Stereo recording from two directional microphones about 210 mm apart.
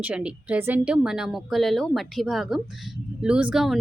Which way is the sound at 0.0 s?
5° right (ahead or behind).